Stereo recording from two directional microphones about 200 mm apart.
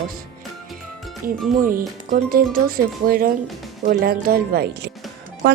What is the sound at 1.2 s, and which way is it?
Speech, 45° right (ahead or behind).